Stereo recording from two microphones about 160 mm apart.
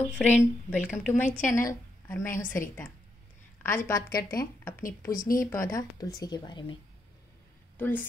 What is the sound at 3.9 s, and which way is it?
Speech, 20° left (ahead or behind).